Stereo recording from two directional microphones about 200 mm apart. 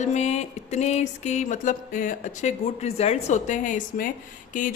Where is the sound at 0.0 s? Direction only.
35° left (ahead or behind).